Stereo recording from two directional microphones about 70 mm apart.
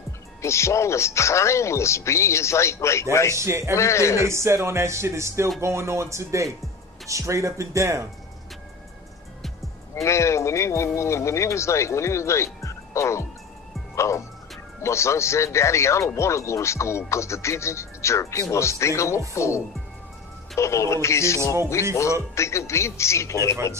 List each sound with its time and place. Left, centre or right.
0.4 s speech: left
3.3 s speech: right
3.7 s speech: left
4.3 s speech: right
10.0 s speech: left
12.6 s music: left
13.9 s speech: left